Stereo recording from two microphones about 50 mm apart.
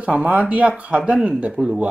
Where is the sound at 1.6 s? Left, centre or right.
Centre.